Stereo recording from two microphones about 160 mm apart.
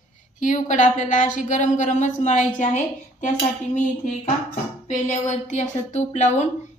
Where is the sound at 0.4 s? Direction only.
50° left (ahead or behind).